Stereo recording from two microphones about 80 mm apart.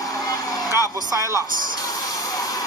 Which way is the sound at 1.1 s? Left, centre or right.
Right.